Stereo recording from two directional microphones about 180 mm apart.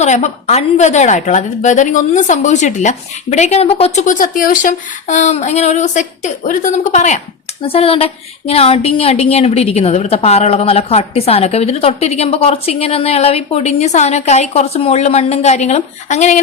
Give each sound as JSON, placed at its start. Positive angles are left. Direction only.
{"t": 0.0, "sound": "speech", "side_deg": 40}